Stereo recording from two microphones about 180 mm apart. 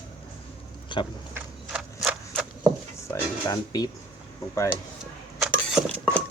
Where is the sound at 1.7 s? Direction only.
Centre (ahead or behind).